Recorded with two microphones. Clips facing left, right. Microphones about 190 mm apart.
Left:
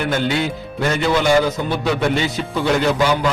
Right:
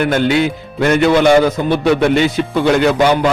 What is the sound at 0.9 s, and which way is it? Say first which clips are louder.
Speech: right 6 dB; 60° right (ahead or behind).